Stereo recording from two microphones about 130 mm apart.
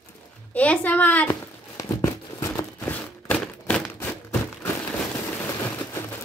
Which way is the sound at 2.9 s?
10° left (ahead or behind).